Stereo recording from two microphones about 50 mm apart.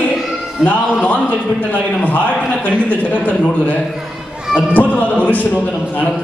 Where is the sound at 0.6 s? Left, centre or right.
Centre.